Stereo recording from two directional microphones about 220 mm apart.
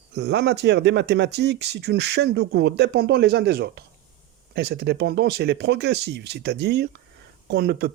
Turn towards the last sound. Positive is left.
turn(degrees=-45)  # may be behind; listen again after turning